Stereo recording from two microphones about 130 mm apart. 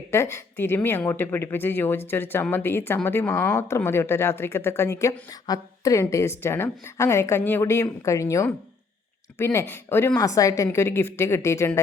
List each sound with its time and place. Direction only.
0.1 s a woman's voice: 20° left (ahead or behind)